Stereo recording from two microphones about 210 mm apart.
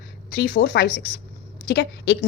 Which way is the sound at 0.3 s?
40° left (ahead or behind).